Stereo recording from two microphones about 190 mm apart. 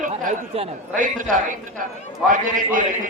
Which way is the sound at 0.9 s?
45° right (ahead or behind).